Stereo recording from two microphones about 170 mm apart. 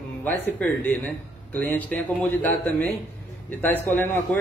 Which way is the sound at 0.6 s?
10° left (ahead or behind).